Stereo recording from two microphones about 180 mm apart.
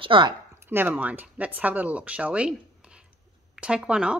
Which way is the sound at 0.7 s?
10° right (ahead or behind).